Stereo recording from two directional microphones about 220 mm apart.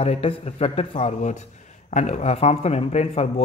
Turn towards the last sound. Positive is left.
turn(degrees=30)  # may be behind; listen again after turning